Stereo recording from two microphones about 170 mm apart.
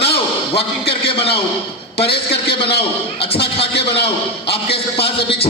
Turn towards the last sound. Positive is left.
turn(degrees=35)  # may be behind; listen again after turning